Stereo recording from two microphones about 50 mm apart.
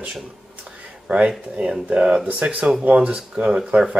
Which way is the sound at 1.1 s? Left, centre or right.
Right.